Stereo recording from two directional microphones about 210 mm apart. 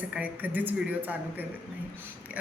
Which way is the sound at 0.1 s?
10° right (ahead or behind).